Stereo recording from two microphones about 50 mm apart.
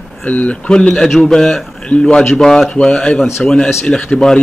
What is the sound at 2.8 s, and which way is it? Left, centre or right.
Speech, centre.